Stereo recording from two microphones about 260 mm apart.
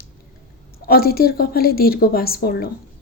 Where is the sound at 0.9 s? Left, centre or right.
Left.